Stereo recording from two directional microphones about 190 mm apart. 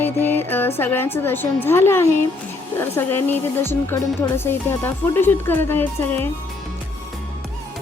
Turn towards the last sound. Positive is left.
turn(degrees=10)  # may be behind; listen again after turning